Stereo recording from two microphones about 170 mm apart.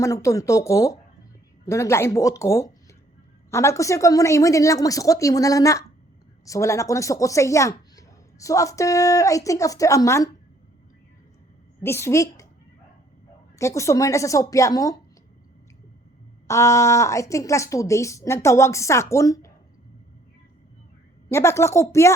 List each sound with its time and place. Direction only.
0.0 s a woman's voice: 15° left (ahead or behind)
11.8 s speech: 15° left (ahead or behind)
13.6 s a woman's voice: 15° left (ahead or behind)
16.5 s speech: 15° left (ahead or behind)
21.2 s speech: 15° left (ahead or behind)